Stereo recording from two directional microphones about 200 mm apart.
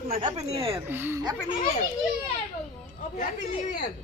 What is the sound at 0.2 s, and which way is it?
Speech, 30° right (ahead or behind).